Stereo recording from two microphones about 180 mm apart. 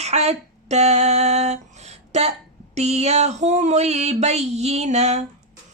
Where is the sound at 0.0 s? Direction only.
35° right (ahead or behind).